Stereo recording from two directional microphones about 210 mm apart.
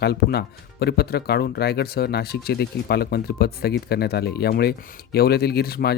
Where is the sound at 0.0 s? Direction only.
50° left (ahead or behind).